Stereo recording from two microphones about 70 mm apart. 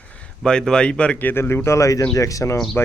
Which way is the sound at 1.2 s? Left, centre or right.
Left.